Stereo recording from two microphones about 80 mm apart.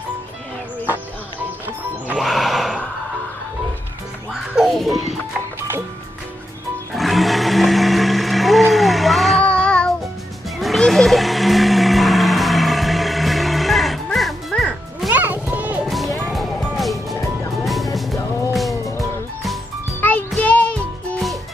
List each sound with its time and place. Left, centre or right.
2.1 s music: centre
4.3 s music: centre
6.9 s a sound: centre
9.4 s child singing: centre
10.6 s a sound: centre
14.5 s music: centre
15.0 s music: right
15.8 s music: centre
18.5 s music: centre
20.0 s music: left